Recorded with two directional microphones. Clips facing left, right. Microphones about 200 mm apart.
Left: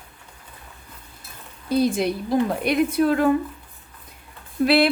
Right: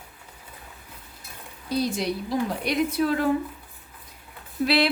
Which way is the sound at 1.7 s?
55° left (ahead or behind).